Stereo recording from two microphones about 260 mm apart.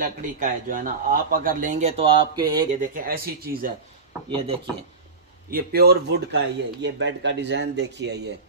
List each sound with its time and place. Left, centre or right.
0.0 s speech: right; by 2.8 s centre
2.8 s a man's voice: right
5.5 s a man's voice: right